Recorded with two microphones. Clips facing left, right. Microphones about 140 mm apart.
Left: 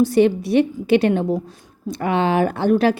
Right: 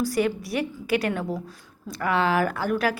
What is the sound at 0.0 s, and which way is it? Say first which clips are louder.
Speech: left 9 dB; 25° left (ahead or behind).